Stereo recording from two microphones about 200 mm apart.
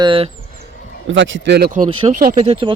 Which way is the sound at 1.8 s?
25° right (ahead or behind).